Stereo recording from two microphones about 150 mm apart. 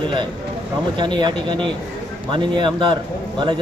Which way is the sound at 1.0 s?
30° right (ahead or behind).